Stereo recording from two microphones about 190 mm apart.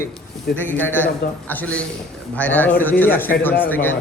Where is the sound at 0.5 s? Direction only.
10° left (ahead or behind).